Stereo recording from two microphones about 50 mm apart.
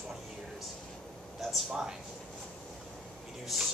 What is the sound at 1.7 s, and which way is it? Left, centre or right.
Speech, centre.